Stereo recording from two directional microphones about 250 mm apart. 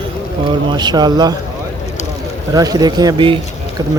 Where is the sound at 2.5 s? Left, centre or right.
Centre.